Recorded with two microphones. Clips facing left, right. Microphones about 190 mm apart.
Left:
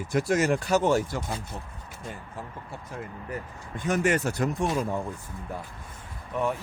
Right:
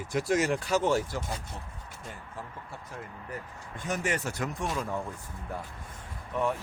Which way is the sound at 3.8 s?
60° left (ahead or behind).